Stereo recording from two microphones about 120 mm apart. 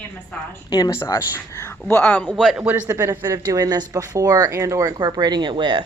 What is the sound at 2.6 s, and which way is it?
Speech, 15° right (ahead or behind).